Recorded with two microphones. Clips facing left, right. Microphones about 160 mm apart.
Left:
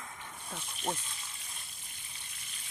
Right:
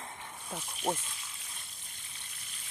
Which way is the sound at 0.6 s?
5° right (ahead or behind).